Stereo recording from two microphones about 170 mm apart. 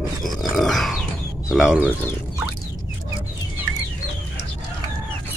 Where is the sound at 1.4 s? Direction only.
5° right (ahead or behind).